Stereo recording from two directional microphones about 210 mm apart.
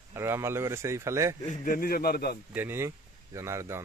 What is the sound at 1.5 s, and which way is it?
Speech, 40° left (ahead or behind).